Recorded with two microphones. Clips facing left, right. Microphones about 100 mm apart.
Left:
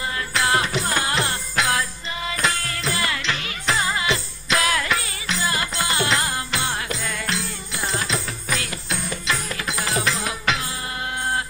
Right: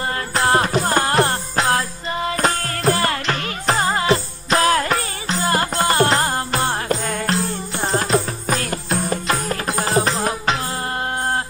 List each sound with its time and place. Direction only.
0.3 s music: 40° right (ahead or behind)